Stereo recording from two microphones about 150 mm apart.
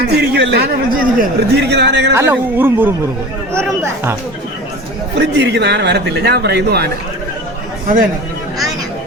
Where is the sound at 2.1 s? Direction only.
15° right (ahead or behind).